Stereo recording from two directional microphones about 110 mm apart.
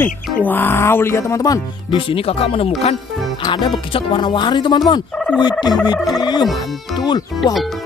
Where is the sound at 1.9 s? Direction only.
55° left (ahead or behind).